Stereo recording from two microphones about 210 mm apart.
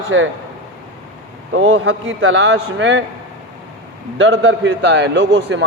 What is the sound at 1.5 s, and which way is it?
A man's voice, 65° right (ahead or behind).